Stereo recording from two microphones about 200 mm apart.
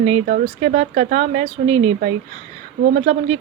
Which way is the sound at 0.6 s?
40° right (ahead or behind).